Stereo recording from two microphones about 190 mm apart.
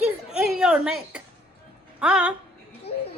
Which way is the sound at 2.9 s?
30° left (ahead or behind).